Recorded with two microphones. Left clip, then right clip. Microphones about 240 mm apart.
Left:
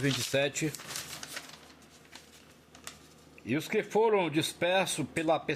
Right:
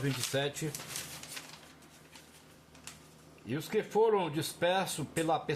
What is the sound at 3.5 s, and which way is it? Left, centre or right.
A man's voice, left.